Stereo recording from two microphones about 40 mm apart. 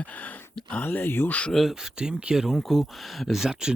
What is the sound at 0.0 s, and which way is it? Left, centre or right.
Speech, left.